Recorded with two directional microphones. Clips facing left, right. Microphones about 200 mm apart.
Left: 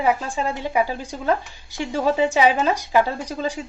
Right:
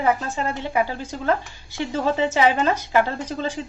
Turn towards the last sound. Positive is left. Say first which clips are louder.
# even
turn(degrees=10)  # may be behind; listen again after turning